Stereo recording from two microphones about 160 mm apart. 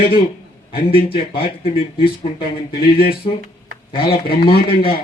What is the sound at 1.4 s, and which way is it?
Speech, 35° left (ahead or behind).